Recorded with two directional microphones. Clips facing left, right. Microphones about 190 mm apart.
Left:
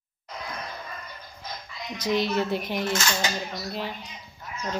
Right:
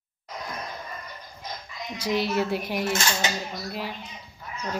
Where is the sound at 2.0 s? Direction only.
10° right (ahead or behind).